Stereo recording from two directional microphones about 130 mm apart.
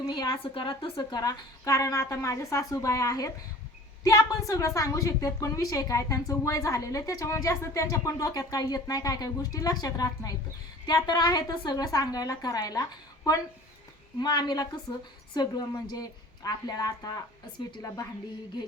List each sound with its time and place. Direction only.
0.1 s a woman's voice: 35° left (ahead or behind)